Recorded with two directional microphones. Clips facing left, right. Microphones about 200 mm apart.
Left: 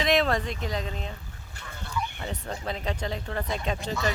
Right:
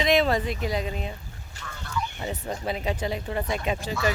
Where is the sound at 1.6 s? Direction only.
55° left (ahead or behind).